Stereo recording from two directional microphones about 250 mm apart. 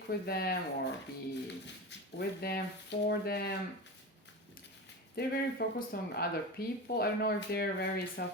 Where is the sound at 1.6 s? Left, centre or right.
Left.